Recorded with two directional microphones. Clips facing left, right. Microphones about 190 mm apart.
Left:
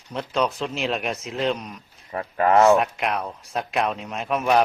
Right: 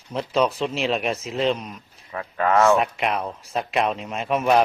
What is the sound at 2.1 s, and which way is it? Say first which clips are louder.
Speech: left 2 dB; 35° left (ahead or behind).